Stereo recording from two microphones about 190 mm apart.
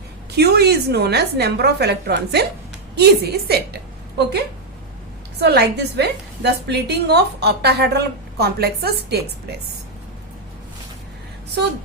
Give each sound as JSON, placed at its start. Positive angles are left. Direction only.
{"t": 0.3, "sound": "a woman's voice", "side_deg": -60}
{"t": 5.4, "sound": "a woman's voice", "side_deg": -60}